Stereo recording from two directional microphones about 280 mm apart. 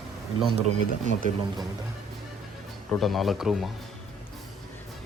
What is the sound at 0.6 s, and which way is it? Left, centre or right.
Speech, right.